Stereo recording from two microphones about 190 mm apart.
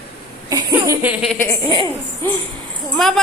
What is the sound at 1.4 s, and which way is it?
Speech, 15° left (ahead or behind).